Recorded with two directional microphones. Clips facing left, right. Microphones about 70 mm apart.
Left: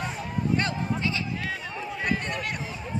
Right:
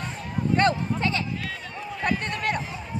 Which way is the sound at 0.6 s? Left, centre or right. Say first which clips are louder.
Right 5 dB; right.